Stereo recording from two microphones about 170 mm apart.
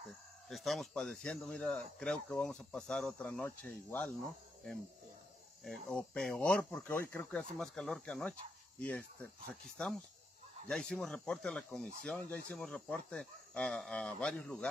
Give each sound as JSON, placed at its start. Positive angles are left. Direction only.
{"t": 0.5, "sound": "speech", "side_deg": 0}
{"t": 5.6, "sound": "speech", "side_deg": 0}